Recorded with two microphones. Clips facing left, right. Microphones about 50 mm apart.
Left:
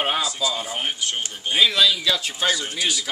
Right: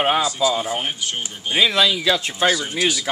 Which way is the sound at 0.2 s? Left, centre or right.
Centre.